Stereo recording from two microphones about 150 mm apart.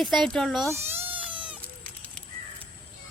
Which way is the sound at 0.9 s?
15° right (ahead or behind).